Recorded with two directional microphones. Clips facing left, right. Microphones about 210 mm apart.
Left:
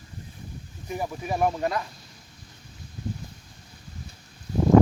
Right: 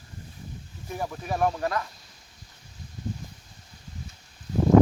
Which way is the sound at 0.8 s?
10° left (ahead or behind).